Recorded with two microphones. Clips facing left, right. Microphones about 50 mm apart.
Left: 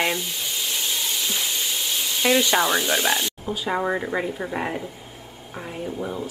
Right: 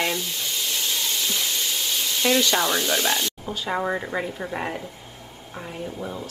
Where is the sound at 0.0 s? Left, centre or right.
Centre.